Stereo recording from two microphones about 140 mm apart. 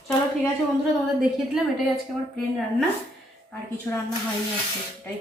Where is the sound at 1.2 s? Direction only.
5° right (ahead or behind).